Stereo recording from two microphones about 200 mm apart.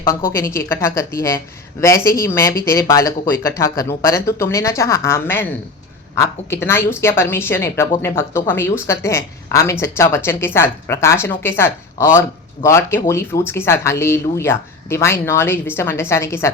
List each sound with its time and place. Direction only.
0.3 s a woman's voice: 15° left (ahead or behind)